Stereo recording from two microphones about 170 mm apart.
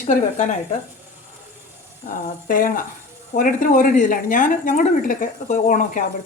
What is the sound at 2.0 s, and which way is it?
Speech, 55° left (ahead or behind).